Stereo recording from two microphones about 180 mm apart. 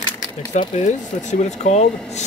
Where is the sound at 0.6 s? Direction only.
40° left (ahead or behind).